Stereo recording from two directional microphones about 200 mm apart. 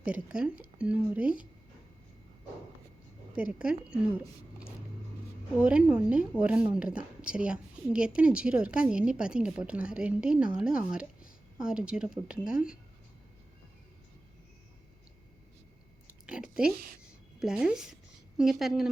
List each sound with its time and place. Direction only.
0.0 s a woman's voice: 5° right (ahead or behind)
3.3 s a woman's voice: 5° right (ahead or behind)
5.6 s a woman's voice: 5° right (ahead or behind)
16.2 s speech: 5° right (ahead or behind)
16.7 s a woman's voice: 45° right (ahead or behind)
17.4 s a woman's voice: 5° right (ahead or behind)